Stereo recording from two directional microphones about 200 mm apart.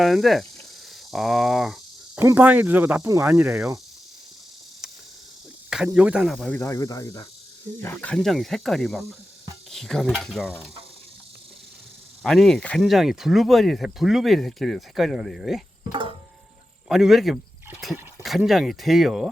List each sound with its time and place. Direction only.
0.0 s speech: centre (ahead or behind)
5.7 s speech: 5° right (ahead or behind)
6.6 s speech: 15° left (ahead or behind)
12.2 s speech: centre (ahead or behind)
15.9 s music: 25° right (ahead or behind)
16.9 s speech: centre (ahead or behind)